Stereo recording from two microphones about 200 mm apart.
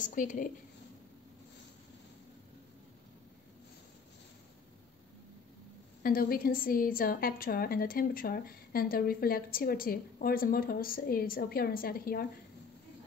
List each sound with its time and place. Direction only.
0.0 s a woman's voice: 40° left (ahead or behind)
6.0 s a woman's voice: 45° left (ahead or behind)